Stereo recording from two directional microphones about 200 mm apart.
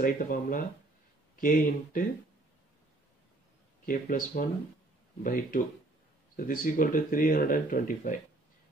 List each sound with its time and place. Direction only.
0.0 s speech: 45° left (ahead or behind)
3.8 s speech: 45° left (ahead or behind)